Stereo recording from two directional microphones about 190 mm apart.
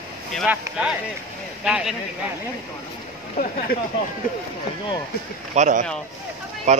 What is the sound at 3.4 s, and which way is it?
Speech, 50° left (ahead or behind).